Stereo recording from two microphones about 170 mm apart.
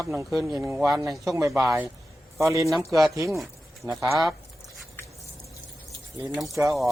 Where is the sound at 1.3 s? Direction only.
15° right (ahead or behind).